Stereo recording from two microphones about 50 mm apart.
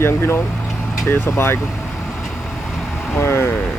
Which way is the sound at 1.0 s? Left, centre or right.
Left.